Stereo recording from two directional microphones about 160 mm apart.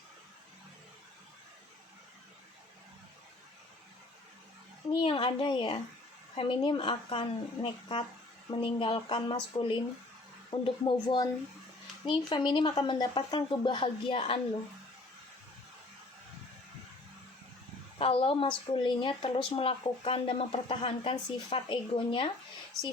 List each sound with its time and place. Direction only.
4.9 s speech: 35° left (ahead or behind)
17.9 s speech: 35° left (ahead or behind)